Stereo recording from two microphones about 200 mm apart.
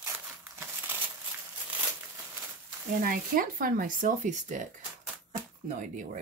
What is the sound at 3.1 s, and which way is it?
Speech, 45° right (ahead or behind).